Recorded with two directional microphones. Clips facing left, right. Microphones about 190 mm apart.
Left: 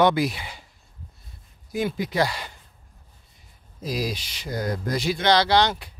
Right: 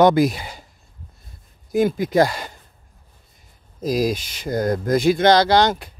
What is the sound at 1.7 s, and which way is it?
Speech, 45° right (ahead or behind).